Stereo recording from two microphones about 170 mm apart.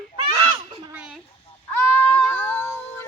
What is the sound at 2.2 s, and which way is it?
Cat, 5° left (ahead or behind).